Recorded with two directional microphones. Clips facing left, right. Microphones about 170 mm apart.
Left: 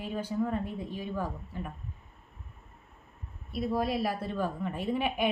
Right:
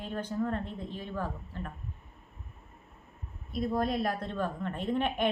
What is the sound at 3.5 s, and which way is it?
A woman's voice, 5° left (ahead or behind).